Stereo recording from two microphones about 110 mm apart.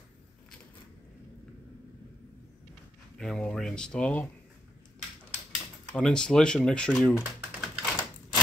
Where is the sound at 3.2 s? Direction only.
5° left (ahead or behind).